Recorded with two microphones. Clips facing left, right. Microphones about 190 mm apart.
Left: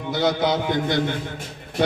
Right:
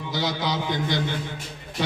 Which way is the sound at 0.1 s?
55° left (ahead or behind).